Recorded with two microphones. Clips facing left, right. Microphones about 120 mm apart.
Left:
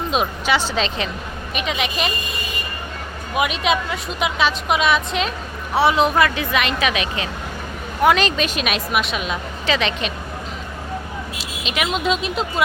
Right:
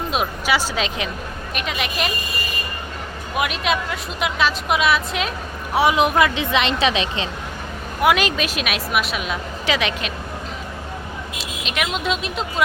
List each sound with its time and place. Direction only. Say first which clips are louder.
0.1 s a woman's voice: left 2 dB; 5° right (ahead or behind)
3.3 s a woman's voice: left 2 dB; centre (ahead or behind); by 7.3 s 30° right (ahead or behind)
8.0 s a woman's voice: left 2 dB; 5° right (ahead or behind)
11.3 s a woman's voice: even; centre (ahead or behind)